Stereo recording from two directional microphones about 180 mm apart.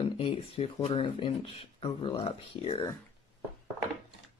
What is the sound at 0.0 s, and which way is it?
Speech, 30° left (ahead or behind).